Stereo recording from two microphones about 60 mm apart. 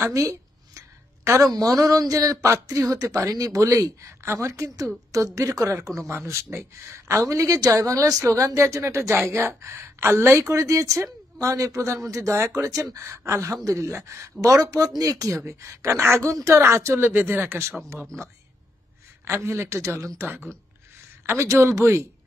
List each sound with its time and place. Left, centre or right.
0.1 s a woman's voice: right
9.2 s a woman's voice: right
10.4 s speech: right
14.4 s speech: right
16.6 s speech: right
19.2 s a woman's voice: right
21.3 s a woman's voice: right